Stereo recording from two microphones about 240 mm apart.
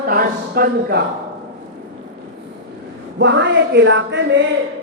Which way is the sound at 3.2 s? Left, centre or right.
Right.